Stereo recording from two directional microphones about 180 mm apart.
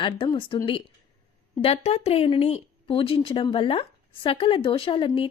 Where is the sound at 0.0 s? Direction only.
30° left (ahead or behind).